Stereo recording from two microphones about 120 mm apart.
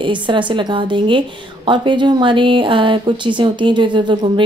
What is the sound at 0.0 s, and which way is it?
A woman's voice, 40° right (ahead or behind).